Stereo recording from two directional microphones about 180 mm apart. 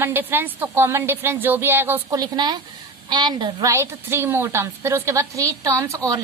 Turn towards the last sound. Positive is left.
turn(degrees=-15)  # may be behind; listen again after turning